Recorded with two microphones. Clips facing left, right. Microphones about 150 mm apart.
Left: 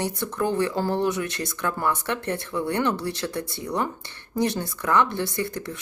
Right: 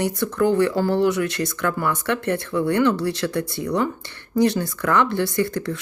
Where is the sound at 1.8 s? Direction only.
25° left (ahead or behind).